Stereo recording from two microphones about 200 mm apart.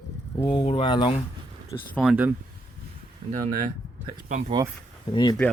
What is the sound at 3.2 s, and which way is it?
Speech, 25° right (ahead or behind).